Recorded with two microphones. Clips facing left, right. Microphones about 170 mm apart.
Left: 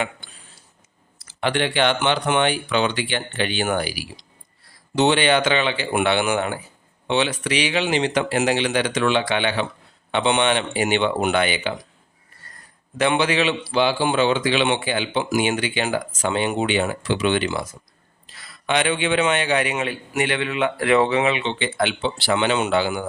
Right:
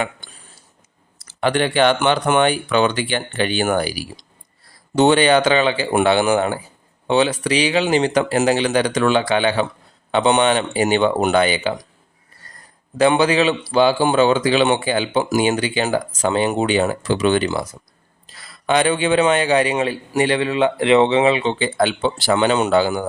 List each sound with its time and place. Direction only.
1.3 s a man's voice: 45° right (ahead or behind)
13.0 s a man's voice: 35° right (ahead or behind)